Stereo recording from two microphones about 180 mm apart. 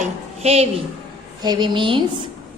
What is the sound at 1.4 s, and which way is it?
Speech, 25° right (ahead or behind).